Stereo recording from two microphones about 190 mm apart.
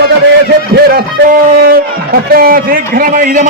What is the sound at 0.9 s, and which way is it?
A man's voice, 55° right (ahead or behind).